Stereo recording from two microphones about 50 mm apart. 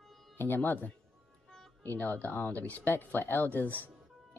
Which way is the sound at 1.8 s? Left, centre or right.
Left.